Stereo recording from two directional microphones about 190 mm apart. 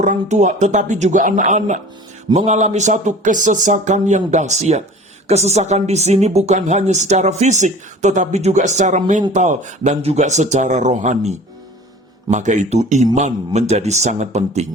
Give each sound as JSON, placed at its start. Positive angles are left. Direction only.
{"t": 0.0, "sound": "speech", "side_deg": -40}